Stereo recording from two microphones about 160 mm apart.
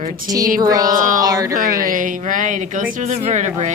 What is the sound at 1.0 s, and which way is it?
Speech, 55° right (ahead or behind).